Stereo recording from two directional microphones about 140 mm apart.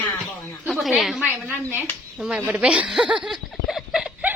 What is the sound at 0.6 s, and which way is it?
A woman's voice, centre (ahead or behind).